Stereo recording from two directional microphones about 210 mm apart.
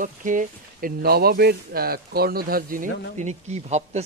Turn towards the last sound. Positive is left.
turn(degrees=-30)  # may be behind; listen again after turning